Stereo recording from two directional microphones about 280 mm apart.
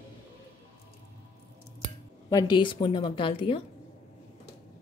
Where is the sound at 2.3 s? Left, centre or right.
Centre.